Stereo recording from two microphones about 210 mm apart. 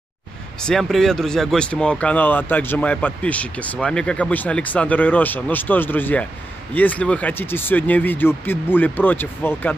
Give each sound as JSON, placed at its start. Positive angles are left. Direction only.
{"t": 0.6, "sound": "speech", "side_deg": 5}